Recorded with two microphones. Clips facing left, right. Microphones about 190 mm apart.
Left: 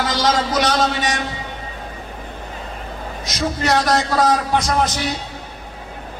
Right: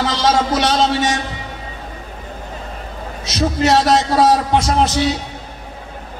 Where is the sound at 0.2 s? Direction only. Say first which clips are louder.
Right 2 dB; 25° right (ahead or behind).